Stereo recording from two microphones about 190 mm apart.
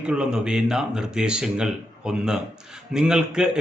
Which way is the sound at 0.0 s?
5° right (ahead or behind).